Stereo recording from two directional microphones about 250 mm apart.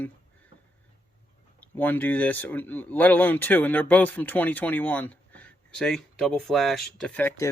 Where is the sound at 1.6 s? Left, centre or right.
Centre.